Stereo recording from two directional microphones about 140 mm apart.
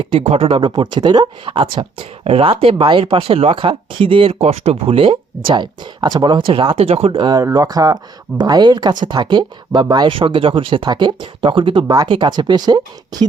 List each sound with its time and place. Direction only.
0.0 s speech: 45° right (ahead or behind)